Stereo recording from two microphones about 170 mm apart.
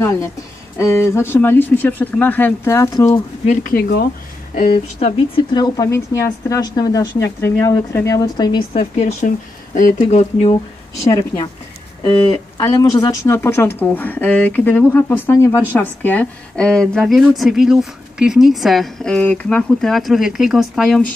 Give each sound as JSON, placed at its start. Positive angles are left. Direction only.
{"t": 0.7, "sound": "speech", "side_deg": 15}
{"t": 3.7, "sound": "speech", "side_deg": 65}
{"t": 4.7, "sound": "a woman's voice", "side_deg": 35}
{"t": 12.0, "sound": "speech", "side_deg": 30}